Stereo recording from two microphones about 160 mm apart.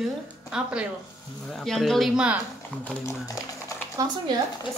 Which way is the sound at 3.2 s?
20° left (ahead or behind).